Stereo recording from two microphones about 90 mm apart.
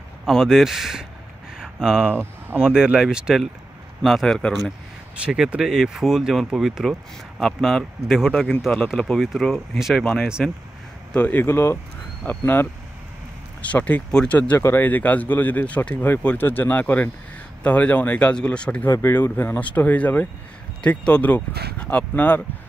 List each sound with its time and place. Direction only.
0.2 s speech: 5° right (ahead or behind)
4.0 s speech: centre (ahead or behind)
5.2 s speech: 10° right (ahead or behind); by 10.5 s 10° left (ahead or behind)
11.1 s speech: 20° left (ahead or behind)
18.9 s speech: 25° left (ahead or behind)